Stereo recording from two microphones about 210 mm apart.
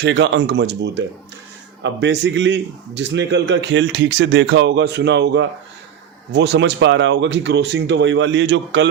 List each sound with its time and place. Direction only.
0.0 s a man's voice: 55° right (ahead or behind)